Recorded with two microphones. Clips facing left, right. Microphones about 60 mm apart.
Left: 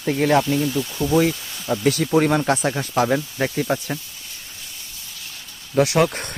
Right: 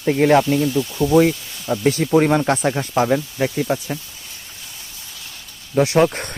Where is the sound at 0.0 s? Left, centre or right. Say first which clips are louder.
Right 4 dB; right.